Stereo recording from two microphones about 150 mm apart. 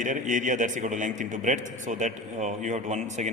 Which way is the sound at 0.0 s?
60° right (ahead or behind).